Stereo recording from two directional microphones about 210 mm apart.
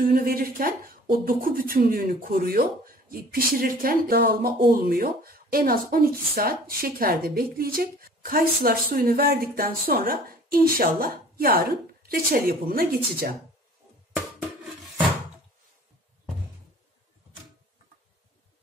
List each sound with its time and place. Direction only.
0.1 s speech: 45° right (ahead or behind)